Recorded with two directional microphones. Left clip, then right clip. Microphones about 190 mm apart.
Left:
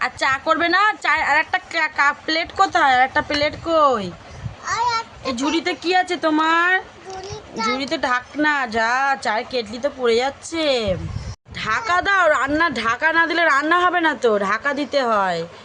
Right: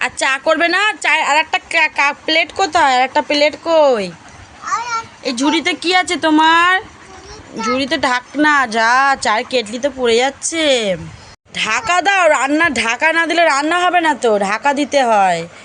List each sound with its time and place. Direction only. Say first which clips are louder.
0.0 s a woman's voice: right 4 dB; 15° right (ahead or behind)
5.2 s a woman's voice: right 8 dB; 15° right (ahead or behind)